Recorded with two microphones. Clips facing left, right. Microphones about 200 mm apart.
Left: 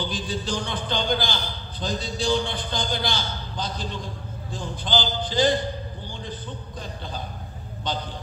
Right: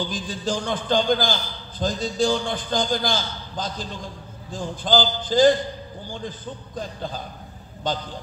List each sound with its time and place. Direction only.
0.0 s a man's voice: 45° right (ahead or behind)